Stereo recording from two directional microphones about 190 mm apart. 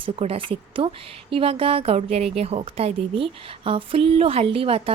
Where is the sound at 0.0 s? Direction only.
30° right (ahead or behind).